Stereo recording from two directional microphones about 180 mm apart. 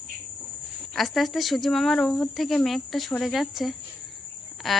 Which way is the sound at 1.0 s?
Centre (ahead or behind).